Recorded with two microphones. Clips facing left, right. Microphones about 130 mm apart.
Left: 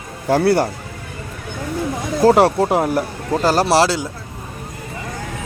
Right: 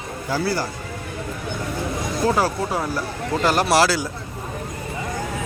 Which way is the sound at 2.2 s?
70° left (ahead or behind).